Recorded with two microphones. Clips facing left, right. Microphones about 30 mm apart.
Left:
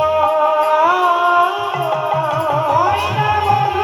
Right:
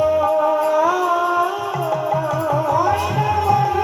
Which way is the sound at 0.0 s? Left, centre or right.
Left.